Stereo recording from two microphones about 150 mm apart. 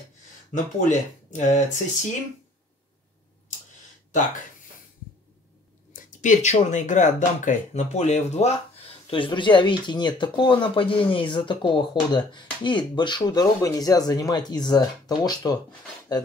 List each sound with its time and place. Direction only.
0.5 s speech: 55° left (ahead or behind)
5.9 s speech: 60° left (ahead or behind)
9.1 s speech: 35° left (ahead or behind)